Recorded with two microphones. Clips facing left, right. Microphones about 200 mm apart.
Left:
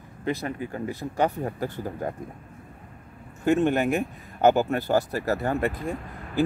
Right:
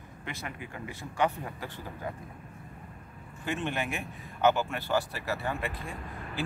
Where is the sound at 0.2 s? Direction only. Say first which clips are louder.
Left 12 dB; 35° left (ahead or behind).